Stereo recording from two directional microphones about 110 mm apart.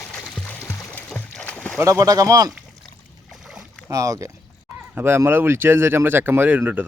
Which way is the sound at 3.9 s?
30° right (ahead or behind).